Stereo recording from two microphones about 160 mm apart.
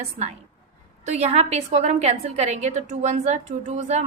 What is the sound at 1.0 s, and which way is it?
A woman's voice, 45° right (ahead or behind).